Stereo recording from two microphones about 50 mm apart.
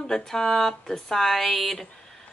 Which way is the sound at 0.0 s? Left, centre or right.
Centre.